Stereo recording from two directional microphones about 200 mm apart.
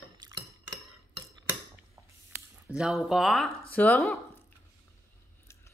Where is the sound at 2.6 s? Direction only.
Centre (ahead or behind).